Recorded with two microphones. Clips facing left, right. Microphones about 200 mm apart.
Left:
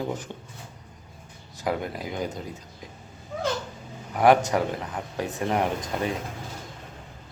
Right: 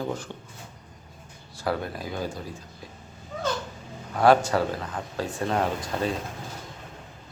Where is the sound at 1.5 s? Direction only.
15° left (ahead or behind).